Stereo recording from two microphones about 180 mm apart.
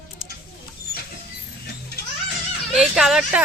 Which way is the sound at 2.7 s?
Centre (ahead or behind).